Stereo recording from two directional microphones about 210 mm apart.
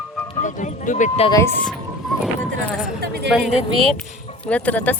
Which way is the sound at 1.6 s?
5° left (ahead or behind).